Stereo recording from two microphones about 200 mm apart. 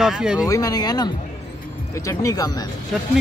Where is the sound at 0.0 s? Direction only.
5° right (ahead or behind).